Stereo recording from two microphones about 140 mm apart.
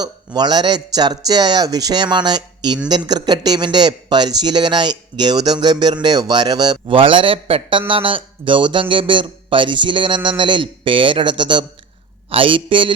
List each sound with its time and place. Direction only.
0.0 s a man's voice: 30° right (ahead or behind)